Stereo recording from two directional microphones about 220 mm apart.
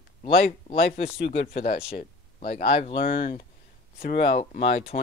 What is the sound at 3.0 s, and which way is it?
Speech, 45° left (ahead or behind).